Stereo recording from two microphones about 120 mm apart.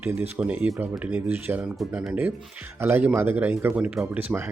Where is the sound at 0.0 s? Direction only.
15° right (ahead or behind).